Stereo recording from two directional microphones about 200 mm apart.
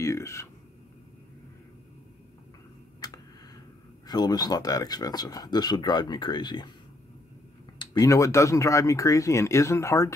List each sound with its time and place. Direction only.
0.0 s speech: 15° left (ahead or behind)
3.0 s tick: 20° left (ahead or behind)
4.1 s speech: 20° left (ahead or behind)
7.8 s speech: 15° left (ahead or behind)